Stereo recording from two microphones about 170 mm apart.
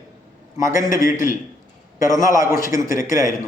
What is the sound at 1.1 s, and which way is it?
Speech, 50° left (ahead or behind).